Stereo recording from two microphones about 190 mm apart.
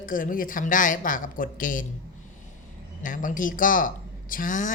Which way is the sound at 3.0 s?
45° left (ahead or behind).